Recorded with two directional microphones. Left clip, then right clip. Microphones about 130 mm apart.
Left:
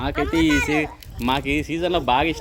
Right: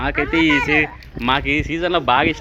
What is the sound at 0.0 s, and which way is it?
Speech, 15° left (ahead or behind).